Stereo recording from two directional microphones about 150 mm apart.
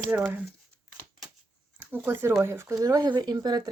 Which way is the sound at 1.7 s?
15° right (ahead or behind).